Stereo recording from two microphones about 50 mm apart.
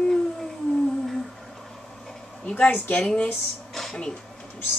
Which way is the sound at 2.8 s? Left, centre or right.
Left.